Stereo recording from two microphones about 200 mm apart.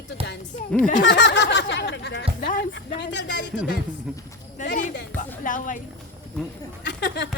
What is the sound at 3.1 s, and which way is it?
Speech, 60° left (ahead or behind).